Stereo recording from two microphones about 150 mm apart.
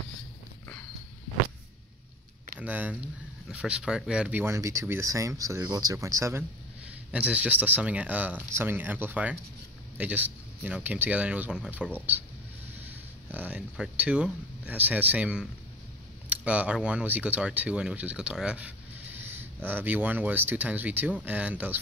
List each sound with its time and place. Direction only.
2.6 s speech: 10° right (ahead or behind)
7.1 s speech: 10° right (ahead or behind)
13.3 s speech: 10° right (ahead or behind)